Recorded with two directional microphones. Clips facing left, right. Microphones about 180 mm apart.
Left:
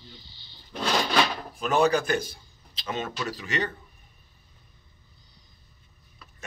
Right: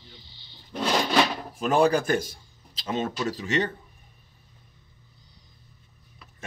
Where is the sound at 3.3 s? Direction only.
25° right (ahead or behind).